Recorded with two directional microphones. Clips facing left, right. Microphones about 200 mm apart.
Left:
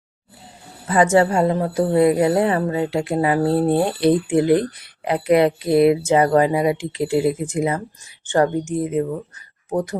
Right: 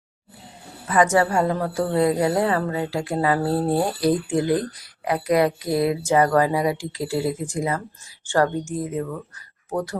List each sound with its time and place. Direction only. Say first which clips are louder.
0.9 s a woman's voice: left 3 dB; 25° left (ahead or behind)